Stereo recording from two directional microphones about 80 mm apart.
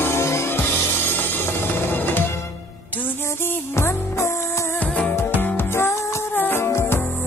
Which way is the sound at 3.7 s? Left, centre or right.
Left.